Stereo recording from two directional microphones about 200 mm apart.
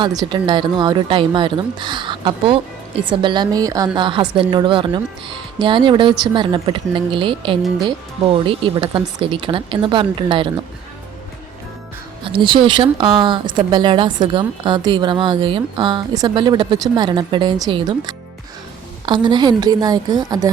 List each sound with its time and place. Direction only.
0.0 s speech: 20° right (ahead or behind)
12.2 s speech: 25° right (ahead or behind)